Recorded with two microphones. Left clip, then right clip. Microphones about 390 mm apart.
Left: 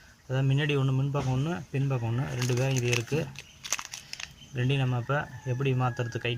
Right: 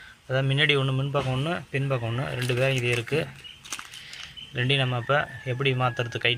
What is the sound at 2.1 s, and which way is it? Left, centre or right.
Speech, right.